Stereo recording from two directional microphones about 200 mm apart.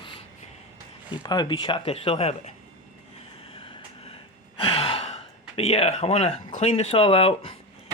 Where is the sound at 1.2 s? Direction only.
20° left (ahead or behind).